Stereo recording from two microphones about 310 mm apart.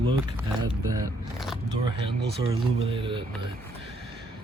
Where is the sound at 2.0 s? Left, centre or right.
Centre.